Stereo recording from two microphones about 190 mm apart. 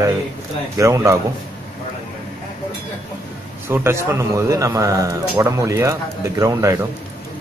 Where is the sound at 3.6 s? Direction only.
10° right (ahead or behind).